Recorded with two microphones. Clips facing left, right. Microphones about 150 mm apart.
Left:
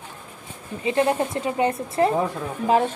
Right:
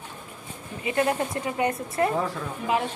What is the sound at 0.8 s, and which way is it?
A woman's voice, 25° left (ahead or behind).